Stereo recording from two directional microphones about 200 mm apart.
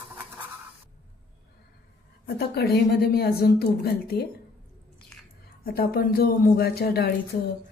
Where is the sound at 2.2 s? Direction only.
55° left (ahead or behind).